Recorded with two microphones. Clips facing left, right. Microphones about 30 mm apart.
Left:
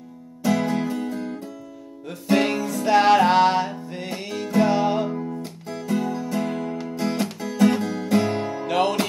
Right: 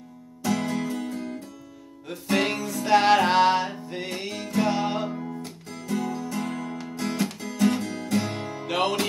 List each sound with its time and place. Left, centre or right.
0.4 s music: centre
8.6 s music: centre